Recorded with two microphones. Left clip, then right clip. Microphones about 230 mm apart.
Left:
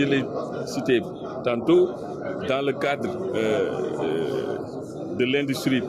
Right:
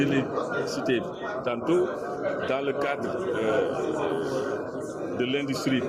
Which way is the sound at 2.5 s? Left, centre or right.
Left.